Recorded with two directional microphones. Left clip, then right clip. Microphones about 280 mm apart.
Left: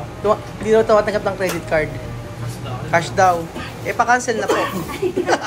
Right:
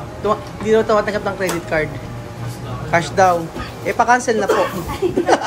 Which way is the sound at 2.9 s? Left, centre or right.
Centre.